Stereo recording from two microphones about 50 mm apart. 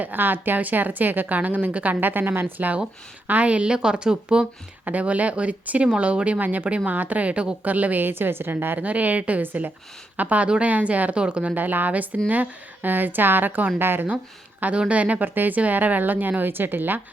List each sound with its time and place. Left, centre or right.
0.0 s a woman's voice: right
3.2 s a woman's voice: right
4.9 s a woman's voice: right
11.5 s a woman's voice: right
14.6 s a woman's voice: right